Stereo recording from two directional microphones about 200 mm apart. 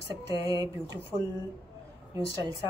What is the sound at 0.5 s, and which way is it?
Speech, 20° right (ahead or behind).